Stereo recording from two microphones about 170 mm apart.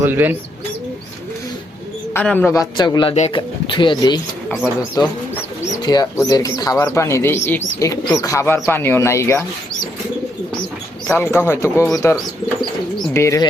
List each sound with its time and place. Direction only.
0.0 s speech: 10° right (ahead or behind)
2.1 s speech: 10° left (ahead or behind)
11.0 s speech: 15° left (ahead or behind)
13.1 s speech: 20° left (ahead or behind)